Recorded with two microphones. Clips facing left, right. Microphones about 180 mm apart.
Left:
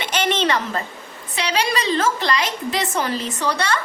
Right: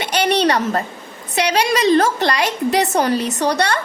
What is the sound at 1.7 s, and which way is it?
A woman's voice, 45° right (ahead or behind).